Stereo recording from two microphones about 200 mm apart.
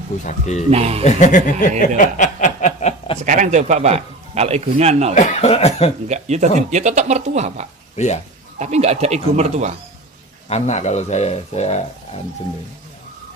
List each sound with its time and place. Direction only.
0.2 s speech: 35° left (ahead or behind)
0.7 s a man's voice: 30° right (ahead or behind)
1.0 s speech: 40° left (ahead or behind)
1.8 s snicker: 40° left (ahead or behind)
3.2 s a man's voice: 35° right (ahead or behind)
5.1 s speech: 35° left (ahead or behind)
6.0 s a man's voice: 35° right (ahead or behind)
7.9 s speech: 35° left (ahead or behind)
8.5 s a man's voice: 35° right (ahead or behind)
10.5 s speech: 35° left (ahead or behind)